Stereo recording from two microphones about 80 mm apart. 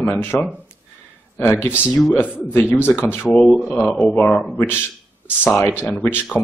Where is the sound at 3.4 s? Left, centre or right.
Centre.